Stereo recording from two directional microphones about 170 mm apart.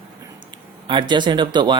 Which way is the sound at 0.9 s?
25° right (ahead or behind).